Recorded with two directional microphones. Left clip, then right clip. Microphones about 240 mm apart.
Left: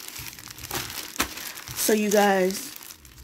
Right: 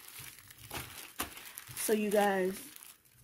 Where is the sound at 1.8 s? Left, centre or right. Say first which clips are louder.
Left 9 dB; centre.